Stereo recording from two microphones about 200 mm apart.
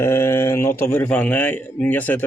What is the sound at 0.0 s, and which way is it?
A man's voice, 10° left (ahead or behind).